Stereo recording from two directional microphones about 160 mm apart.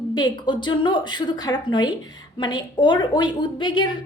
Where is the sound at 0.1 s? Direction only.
30° left (ahead or behind).